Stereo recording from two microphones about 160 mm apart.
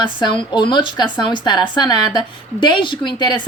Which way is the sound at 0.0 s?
30° left (ahead or behind).